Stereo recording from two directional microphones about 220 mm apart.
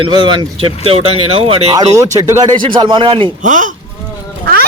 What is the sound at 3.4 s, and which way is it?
Speech, 35° right (ahead or behind).